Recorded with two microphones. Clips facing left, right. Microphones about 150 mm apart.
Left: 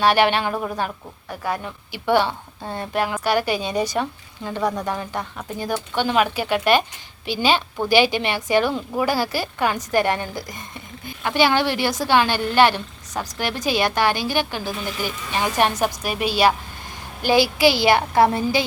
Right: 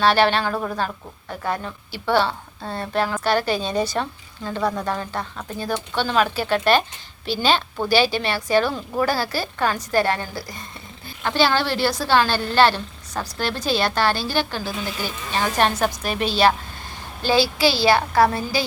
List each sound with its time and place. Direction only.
0.0 s a woman's voice: 15° left (ahead or behind)